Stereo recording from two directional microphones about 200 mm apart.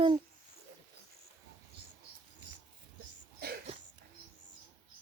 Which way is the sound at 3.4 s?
50° right (ahead or behind).